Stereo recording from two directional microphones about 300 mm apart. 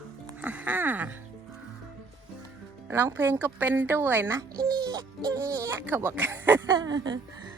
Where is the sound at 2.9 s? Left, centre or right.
Centre.